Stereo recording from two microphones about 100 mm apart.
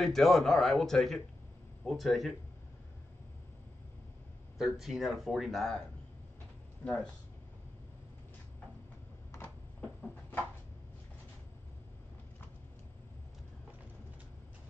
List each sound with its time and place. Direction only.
0.0 s speech: centre (ahead or behind)
4.6 s speech: centre (ahead or behind)
6.8 s speech: 25° left (ahead or behind)